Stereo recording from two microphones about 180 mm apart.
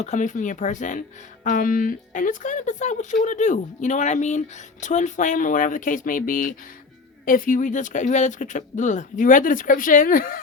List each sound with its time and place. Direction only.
0.0 s speech: 40° left (ahead or behind)